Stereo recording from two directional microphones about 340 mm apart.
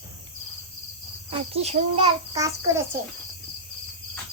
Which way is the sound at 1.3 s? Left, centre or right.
Centre.